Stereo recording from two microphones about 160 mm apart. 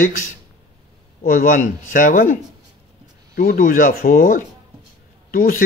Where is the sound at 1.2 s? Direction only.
60° left (ahead or behind).